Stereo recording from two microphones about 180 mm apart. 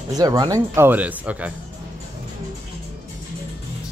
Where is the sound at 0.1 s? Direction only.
20° right (ahead or behind).